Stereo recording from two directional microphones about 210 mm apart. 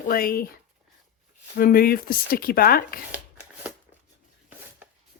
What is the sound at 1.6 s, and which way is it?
Speech, 45° left (ahead or behind).